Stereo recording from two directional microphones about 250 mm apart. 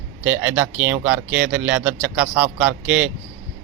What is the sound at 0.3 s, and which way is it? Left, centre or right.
Speech, centre.